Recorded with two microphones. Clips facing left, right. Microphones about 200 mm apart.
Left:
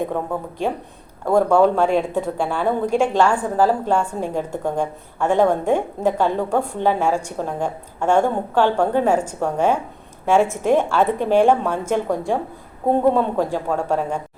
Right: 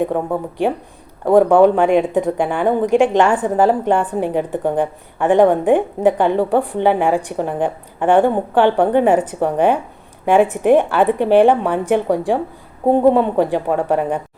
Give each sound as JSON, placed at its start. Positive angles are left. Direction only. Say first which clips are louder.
{"t": 0.0, "sound": "speech", "louder": "right 5 dB", "side_deg": -15}